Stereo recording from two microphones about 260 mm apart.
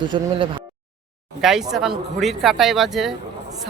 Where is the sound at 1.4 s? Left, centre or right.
Centre.